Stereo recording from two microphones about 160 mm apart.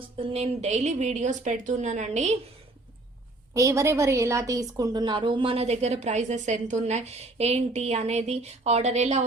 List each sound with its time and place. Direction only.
0.2 s a woman's voice: 35° right (ahead or behind)
3.5 s a woman's voice: 20° right (ahead or behind); by 9.2 s 45° right (ahead or behind)